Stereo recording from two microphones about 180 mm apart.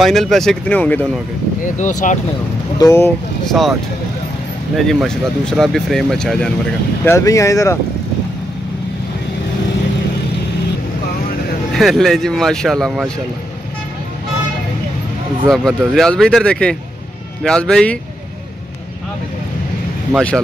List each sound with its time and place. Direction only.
0.0 s speech: centre (ahead or behind)
1.8 s speech: 45° left (ahead or behind)
2.8 s speech: 15° left (ahead or behind)
3.4 s speech: centre (ahead or behind)
4.7 s speech: 5° left (ahead or behind)
7.1 s speech: 15° left (ahead or behind)
11.7 s speech: centre (ahead or behind)
15.4 s speech: centre (ahead or behind)
20.1 s speech: centre (ahead or behind)